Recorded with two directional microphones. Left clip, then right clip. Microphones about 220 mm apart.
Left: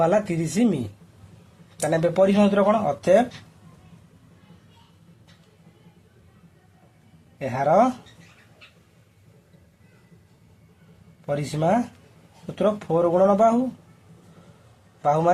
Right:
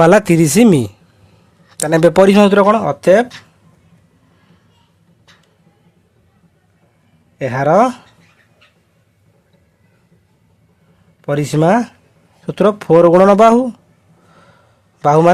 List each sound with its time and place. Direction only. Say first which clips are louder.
0.0 s speech: right 12 dB; 50° right (ahead or behind)
7.3 s speech: right 7 dB; 50° right (ahead or behind)
11.2 s speech: right 10 dB; 50° right (ahead or behind)
15.0 s speech: right 10 dB; 50° right (ahead or behind)